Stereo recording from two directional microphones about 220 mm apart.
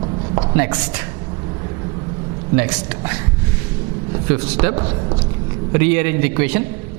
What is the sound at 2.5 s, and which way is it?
Speech, 10° right (ahead or behind).